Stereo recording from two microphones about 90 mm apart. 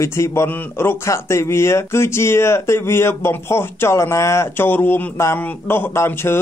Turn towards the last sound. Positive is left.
turn(degrees=30)  # may be behind; listen again after turning